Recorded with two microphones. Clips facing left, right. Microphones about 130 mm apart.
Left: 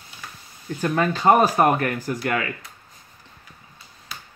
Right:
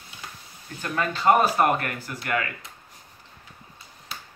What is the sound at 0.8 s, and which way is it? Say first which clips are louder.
Speech: left 3 dB; 35° left (ahead or behind).